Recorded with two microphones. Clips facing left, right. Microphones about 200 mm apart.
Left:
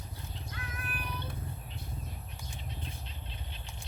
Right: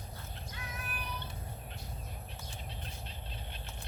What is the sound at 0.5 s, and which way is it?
Music, 55° left (ahead or behind).